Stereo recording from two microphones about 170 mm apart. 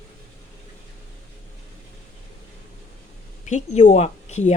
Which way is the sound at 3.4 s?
45° left (ahead or behind).